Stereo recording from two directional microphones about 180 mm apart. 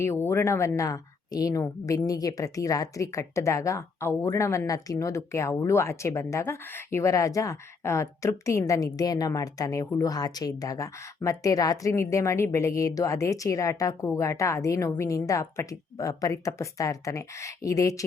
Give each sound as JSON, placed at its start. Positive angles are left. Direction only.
{"t": 0.0, "sound": "speech", "side_deg": 15}